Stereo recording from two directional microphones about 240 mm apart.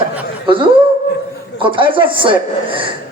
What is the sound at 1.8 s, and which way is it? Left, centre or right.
Speech, right.